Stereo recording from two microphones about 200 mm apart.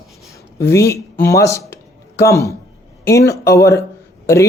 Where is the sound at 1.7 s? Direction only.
15° left (ahead or behind).